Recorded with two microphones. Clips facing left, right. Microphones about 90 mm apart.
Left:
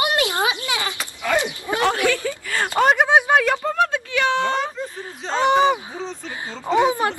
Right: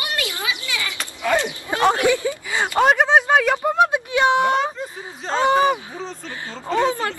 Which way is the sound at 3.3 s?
10° right (ahead or behind).